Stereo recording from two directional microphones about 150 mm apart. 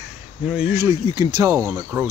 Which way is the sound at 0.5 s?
15° right (ahead or behind).